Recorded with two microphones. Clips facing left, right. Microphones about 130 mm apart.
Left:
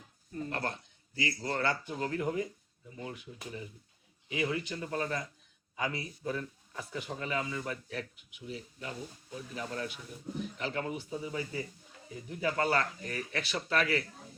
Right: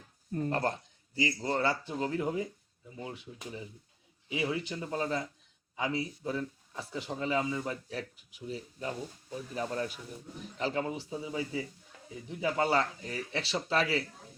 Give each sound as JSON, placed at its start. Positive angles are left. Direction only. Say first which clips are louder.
{"t": 0.3, "sound": "speech", "louder": "right 5 dB", "side_deg": -40}